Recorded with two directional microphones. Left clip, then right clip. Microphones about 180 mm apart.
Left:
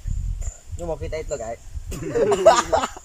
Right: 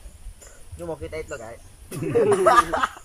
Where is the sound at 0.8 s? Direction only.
20° left (ahead or behind).